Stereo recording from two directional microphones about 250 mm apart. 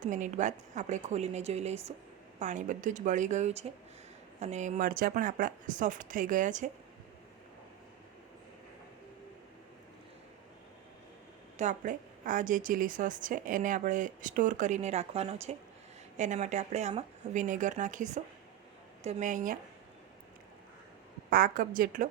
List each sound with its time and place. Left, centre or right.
0.0 s a woman's voice: right
11.5 s a woman's voice: right
21.2 s a woman's voice: right